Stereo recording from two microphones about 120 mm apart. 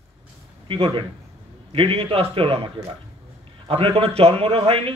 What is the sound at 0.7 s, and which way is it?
A man's voice, 50° right (ahead or behind).